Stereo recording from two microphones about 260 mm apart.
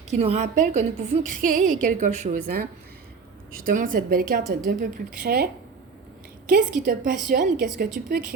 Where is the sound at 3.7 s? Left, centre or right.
Right.